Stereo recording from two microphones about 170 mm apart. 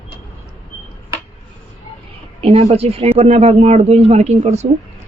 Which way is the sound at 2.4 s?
35° right (ahead or behind).